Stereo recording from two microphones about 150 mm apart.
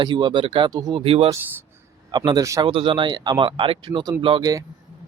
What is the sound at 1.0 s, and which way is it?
Speech, 40° right (ahead or behind).